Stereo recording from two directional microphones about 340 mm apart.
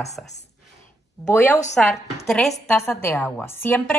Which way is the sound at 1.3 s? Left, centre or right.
Centre.